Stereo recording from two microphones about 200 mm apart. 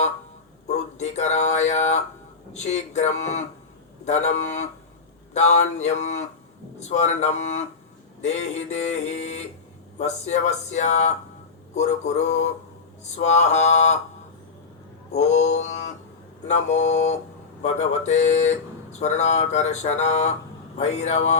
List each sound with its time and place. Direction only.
0.7 s a sound: 35° left (ahead or behind)
2.5 s speech: 35° left (ahead or behind)
15.1 s speech: 35° left (ahead or behind)